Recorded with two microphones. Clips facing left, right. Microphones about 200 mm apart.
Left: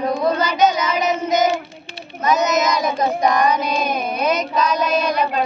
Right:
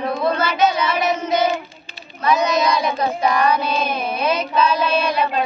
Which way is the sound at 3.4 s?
15° left (ahead or behind).